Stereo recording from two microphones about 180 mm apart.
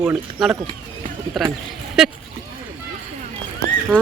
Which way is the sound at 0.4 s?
Centre (ahead or behind).